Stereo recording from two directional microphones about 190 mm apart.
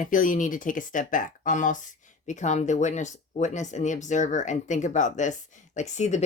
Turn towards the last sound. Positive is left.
turn(degrees=35)  # may be behind; listen again after turning